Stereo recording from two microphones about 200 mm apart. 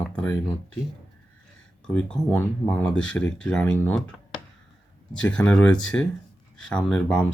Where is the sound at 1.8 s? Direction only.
5° left (ahead or behind).